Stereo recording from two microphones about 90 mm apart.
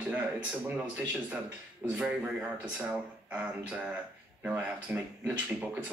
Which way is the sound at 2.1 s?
15° right (ahead or behind).